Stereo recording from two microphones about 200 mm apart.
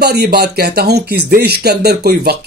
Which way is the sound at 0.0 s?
55° right (ahead or behind).